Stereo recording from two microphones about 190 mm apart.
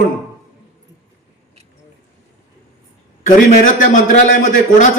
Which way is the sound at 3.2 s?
45° left (ahead or behind).